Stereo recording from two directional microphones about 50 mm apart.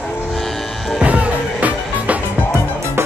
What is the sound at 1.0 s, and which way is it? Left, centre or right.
Music, right.